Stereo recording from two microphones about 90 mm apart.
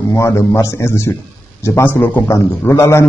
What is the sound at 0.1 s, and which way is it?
A man's voice, 30° left (ahead or behind).